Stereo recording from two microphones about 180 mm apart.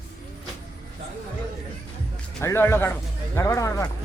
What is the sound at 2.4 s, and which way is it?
Speech, 15° left (ahead or behind).